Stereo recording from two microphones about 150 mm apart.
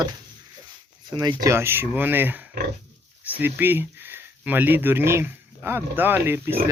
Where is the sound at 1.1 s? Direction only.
25° right (ahead or behind).